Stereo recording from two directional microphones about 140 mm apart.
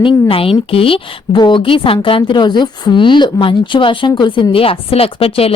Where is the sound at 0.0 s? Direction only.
40° left (ahead or behind).